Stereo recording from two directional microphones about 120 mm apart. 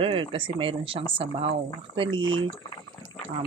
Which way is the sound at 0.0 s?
50° right (ahead or behind).